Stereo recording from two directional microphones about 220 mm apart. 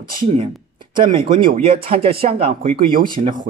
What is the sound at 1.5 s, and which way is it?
Speech, 40° right (ahead or behind).